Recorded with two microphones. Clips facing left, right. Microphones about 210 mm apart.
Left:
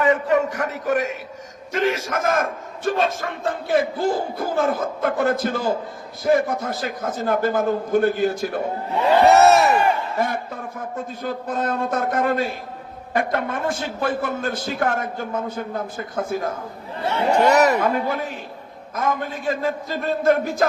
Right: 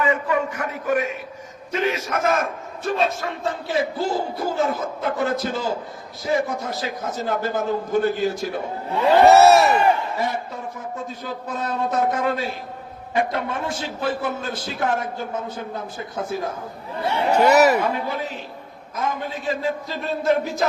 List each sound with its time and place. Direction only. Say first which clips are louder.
0.0 s a sound: left 3 dB; 70° left (ahead or behind)
1.7 s a man's voice: left 1 dB; 50° left (ahead or behind)
9.2 s speech: right 1 dB; centre (ahead or behind)
10.2 s a man's voice: left 2 dB; 55° left (ahead or behind)
17.1 s speech: even; 5° right (ahead or behind)
17.8 s a man's voice: left 3 dB; 50° left (ahead or behind)